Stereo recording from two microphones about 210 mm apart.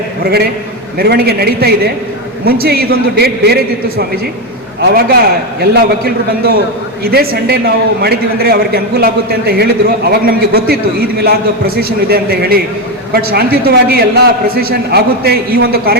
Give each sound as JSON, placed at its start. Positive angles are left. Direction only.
{"t": 0.9, "sound": "a man's voice", "side_deg": -50}
{"t": 7.0, "sound": "a man's voice", "side_deg": -50}